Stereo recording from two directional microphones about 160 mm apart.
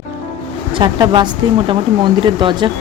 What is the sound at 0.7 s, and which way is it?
Speech, 30° right (ahead or behind).